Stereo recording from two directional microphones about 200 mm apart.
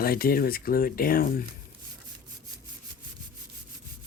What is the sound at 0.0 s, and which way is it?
Speech, 50° left (ahead or behind).